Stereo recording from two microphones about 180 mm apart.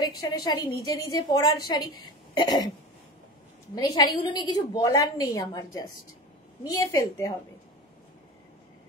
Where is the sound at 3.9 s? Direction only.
20° left (ahead or behind).